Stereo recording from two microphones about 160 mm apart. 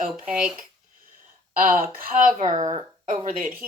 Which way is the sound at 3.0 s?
50° right (ahead or behind).